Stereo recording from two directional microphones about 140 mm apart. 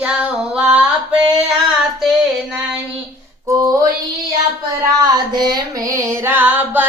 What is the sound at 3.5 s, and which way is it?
Female singing, 25° right (ahead or behind).